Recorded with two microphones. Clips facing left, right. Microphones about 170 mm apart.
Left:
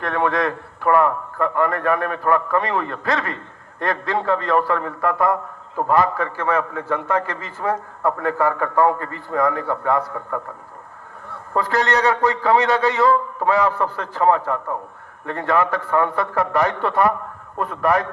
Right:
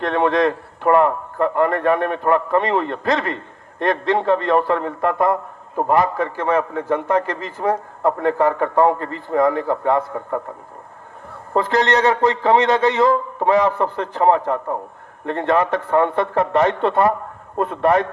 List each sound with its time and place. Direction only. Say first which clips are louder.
0.0 s a man's voice: right 4 dB; 25° right (ahead or behind)
11.5 s a man's voice: right 3 dB; 20° right (ahead or behind)